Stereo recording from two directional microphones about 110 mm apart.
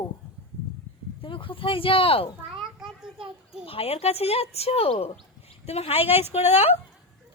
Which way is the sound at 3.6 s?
65° left (ahead or behind).